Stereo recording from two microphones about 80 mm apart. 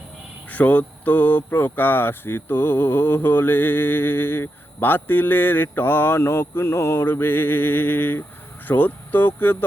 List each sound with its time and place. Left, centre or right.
0.5 s speech: centre